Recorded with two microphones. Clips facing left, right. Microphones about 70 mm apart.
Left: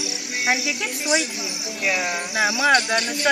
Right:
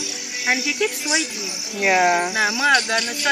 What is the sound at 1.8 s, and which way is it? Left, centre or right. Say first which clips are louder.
Speech: right 8 dB; right.